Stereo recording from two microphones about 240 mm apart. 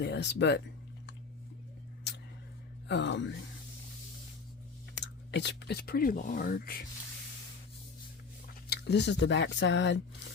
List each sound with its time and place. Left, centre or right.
0.0 s speech: left
2.8 s speech: left
4.9 s speech: left
8.7 s speech: left